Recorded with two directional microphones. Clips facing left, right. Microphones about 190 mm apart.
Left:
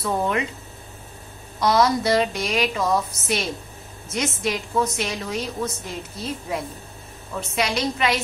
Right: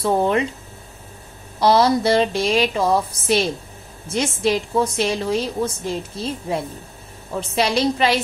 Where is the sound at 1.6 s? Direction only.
30° right (ahead or behind).